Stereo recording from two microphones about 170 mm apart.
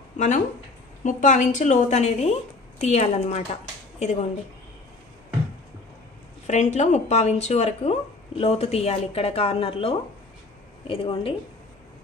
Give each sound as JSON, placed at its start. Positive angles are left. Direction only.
{"t": 1.0, "sound": "a woman's voice", "side_deg": 45}
{"t": 6.4, "sound": "speech", "side_deg": 45}